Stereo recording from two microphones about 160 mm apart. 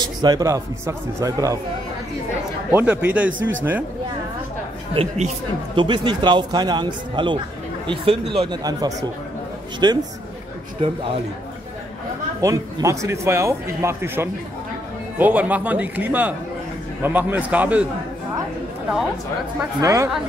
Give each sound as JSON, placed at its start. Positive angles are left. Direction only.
{"t": 0.0, "sound": "speech", "side_deg": -25}
{"t": 2.7, "sound": "speech", "side_deg": -10}
{"t": 4.9, "sound": "speech", "side_deg": -45}
{"t": 5.8, "sound": "speech", "side_deg": -30}
{"t": 12.4, "sound": "speech", "side_deg": -20}
{"t": 19.8, "sound": "speech", "side_deg": -20}